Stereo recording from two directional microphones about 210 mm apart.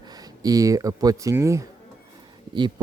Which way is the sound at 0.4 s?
15° right (ahead or behind).